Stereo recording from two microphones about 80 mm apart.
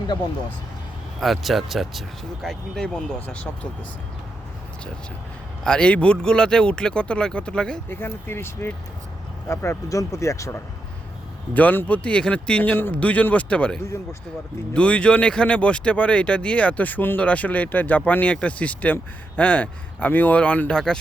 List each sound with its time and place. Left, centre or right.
1.2 s speech: centre
5.6 s speech: centre
7.9 s speech: left
11.5 s speech: left